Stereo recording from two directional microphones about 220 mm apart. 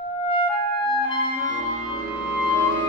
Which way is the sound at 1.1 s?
35° right (ahead or behind).